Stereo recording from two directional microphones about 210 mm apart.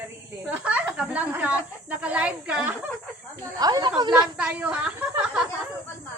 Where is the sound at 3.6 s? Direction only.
20° right (ahead or behind).